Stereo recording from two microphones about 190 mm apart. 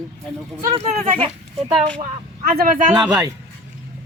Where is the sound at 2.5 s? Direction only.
45° right (ahead or behind).